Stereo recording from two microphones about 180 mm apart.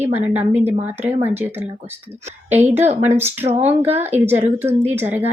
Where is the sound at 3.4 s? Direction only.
35° right (ahead or behind).